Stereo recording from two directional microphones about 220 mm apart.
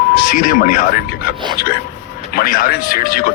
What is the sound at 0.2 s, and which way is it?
Speech, 40° left (ahead or behind).